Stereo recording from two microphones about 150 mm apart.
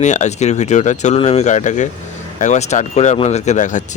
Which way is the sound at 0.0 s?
50° left (ahead or behind).